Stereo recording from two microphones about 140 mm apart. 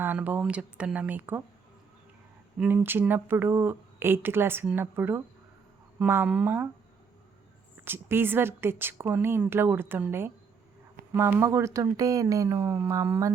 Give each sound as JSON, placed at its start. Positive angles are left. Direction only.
{"t": 0.0, "sound": "speech", "side_deg": -10}
{"t": 2.6, "sound": "speech", "side_deg": -15}
{"t": 7.9, "sound": "speech", "side_deg": -15}